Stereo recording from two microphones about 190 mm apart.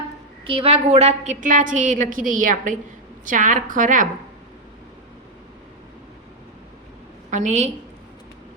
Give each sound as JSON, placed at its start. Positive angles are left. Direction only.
{"t": 0.4, "sound": "a woman's voice", "side_deg": -30}
{"t": 7.3, "sound": "a woman's voice", "side_deg": -40}